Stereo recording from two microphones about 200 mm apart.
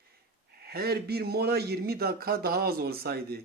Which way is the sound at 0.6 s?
50° right (ahead or behind).